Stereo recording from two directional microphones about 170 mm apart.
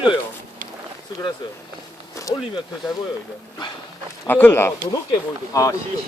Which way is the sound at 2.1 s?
20° left (ahead or behind).